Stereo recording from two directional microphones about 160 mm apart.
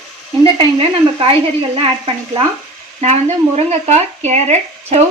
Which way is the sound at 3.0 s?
45° right (ahead or behind).